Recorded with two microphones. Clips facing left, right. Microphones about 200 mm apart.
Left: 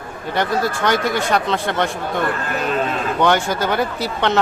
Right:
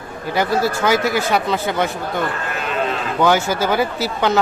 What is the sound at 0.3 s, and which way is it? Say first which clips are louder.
Speech: right 2 dB; 5° right (ahead or behind).